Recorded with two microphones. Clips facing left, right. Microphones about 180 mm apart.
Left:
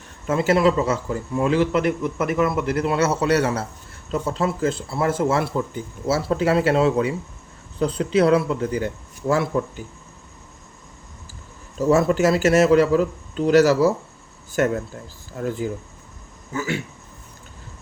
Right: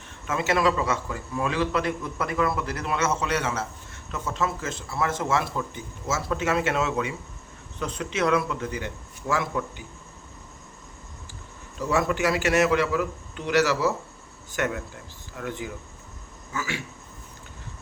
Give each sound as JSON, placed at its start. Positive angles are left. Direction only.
{"t": 0.3, "sound": "a man's voice", "side_deg": 30}
{"t": 11.8, "sound": "speech", "side_deg": 35}